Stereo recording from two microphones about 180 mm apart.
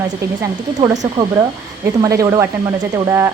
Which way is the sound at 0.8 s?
25° right (ahead or behind).